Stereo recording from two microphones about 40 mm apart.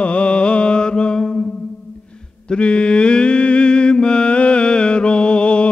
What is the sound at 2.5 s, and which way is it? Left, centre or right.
Mantra, left.